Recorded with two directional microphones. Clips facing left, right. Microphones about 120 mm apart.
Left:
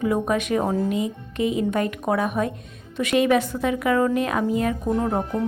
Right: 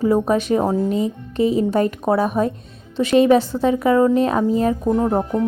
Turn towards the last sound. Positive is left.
turn(degrees=-25)  # may be behind; listen again after turning